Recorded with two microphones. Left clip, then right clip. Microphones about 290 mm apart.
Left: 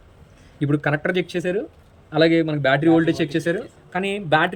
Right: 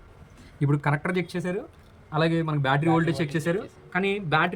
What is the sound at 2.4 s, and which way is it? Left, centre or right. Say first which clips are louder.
Speech: left 7 dB; right.